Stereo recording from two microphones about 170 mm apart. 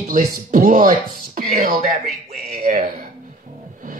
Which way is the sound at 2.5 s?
55° right (ahead or behind).